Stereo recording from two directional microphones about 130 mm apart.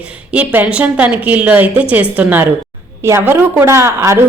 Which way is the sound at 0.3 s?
10° right (ahead or behind).